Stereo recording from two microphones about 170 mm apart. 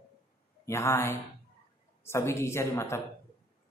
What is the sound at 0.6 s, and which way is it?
A woman's voice, 15° left (ahead or behind).